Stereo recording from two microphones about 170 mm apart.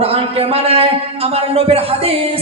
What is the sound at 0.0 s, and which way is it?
A man's voice, 35° right (ahead or behind).